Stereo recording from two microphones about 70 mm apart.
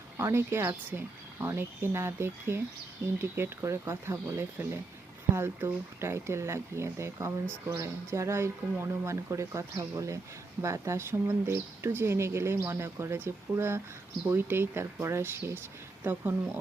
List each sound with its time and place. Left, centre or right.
0.2 s speech: right